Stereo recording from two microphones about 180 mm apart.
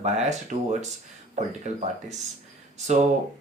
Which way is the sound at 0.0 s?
40° right (ahead or behind).